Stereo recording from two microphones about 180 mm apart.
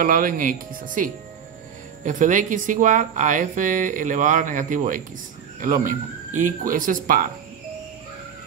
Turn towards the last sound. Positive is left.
turn(degrees=-50)  # may be behind; listen again after turning